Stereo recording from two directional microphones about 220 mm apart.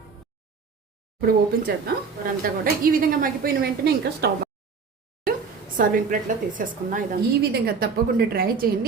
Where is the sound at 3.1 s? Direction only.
40° right (ahead or behind).